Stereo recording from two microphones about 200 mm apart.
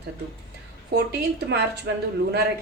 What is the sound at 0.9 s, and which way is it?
Speech, 55° right (ahead or behind).